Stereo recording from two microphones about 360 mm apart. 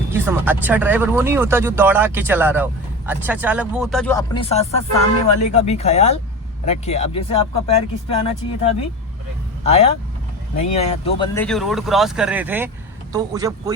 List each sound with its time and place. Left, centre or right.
0.1 s speech: centre
11.3 s speech: centre